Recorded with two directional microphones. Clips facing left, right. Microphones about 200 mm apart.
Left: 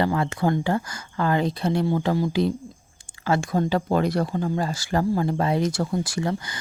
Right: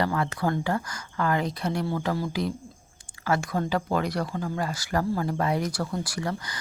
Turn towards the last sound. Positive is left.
turn(degrees=25)  # may be behind; listen again after turning